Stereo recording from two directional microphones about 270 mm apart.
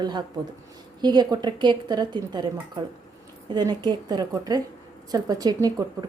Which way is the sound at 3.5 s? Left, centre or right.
Centre.